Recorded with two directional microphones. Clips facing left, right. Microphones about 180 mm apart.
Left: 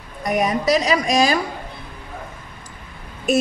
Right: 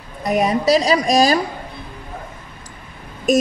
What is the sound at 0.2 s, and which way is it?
A woman's voice, 30° right (ahead or behind).